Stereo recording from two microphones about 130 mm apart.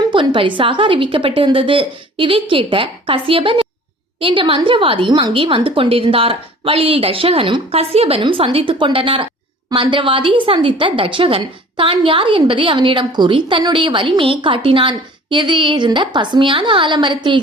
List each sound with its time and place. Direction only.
0.0 s a woman's voice: 40° right (ahead or behind)